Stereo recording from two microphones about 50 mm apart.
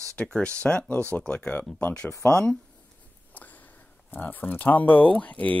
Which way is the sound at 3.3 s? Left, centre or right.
Left.